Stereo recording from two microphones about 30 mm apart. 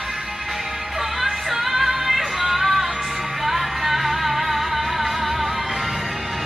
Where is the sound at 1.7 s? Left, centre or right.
Centre.